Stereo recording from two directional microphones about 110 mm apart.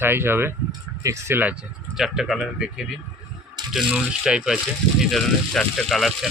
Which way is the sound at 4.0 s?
5° right (ahead or behind).